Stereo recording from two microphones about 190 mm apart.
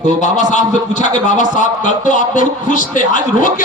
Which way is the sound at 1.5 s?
40° left (ahead or behind).